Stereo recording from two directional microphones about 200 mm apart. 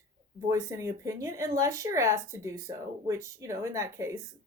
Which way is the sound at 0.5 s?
15° right (ahead or behind).